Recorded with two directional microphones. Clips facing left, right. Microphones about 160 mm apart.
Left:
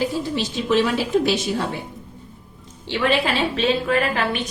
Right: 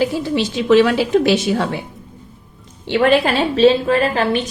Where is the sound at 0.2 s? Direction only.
80° right.